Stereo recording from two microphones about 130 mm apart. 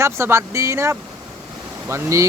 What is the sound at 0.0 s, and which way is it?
Speech, 20° right (ahead or behind).